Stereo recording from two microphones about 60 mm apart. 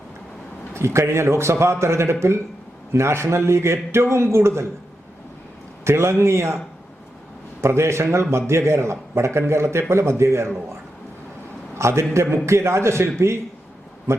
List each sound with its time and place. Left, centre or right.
0.7 s a man's voice: right
5.8 s a man's voice: right
7.6 s a man's voice: right
11.8 s a man's voice: right